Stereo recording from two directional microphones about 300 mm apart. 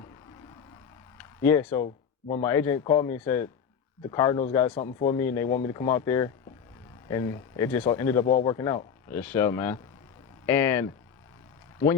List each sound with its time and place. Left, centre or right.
1.4 s speech: centre
1.8 s speech: left
2.4 s speech: centre
8.3 s speech: left
8.5 s speech: centre